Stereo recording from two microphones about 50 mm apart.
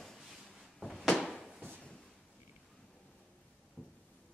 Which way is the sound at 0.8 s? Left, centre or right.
Centre.